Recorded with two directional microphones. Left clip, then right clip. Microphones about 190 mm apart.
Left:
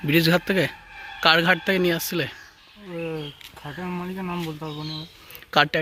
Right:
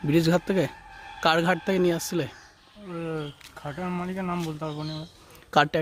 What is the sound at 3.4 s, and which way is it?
Speech, centre (ahead or behind).